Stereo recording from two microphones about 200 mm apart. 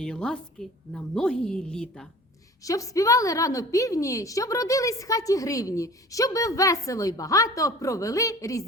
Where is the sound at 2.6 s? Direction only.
15° left (ahead or behind).